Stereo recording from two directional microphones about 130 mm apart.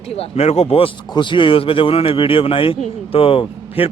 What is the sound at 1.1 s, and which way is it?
Speech, 40° left (ahead or behind).